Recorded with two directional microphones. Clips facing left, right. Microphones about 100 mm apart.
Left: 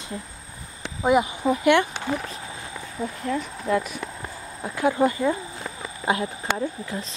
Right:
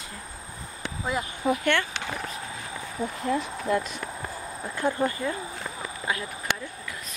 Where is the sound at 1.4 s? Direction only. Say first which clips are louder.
Left 5 dB; 5° left (ahead or behind).